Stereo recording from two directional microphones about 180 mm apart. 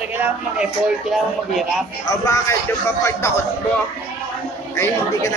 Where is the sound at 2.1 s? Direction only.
20° left (ahead or behind).